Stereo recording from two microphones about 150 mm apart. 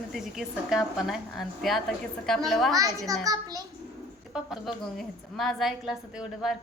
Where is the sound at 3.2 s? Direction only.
25° right (ahead or behind).